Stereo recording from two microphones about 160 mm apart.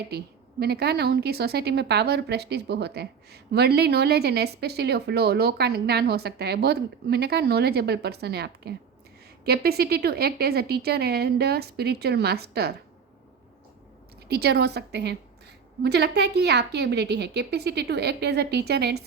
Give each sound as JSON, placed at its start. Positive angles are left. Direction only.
{"t": 0.6, "sound": "a woman's voice", "side_deg": -85}
{"t": 9.4, "sound": "speech", "side_deg": -75}
{"t": 14.3, "sound": "a woman's voice", "side_deg": -85}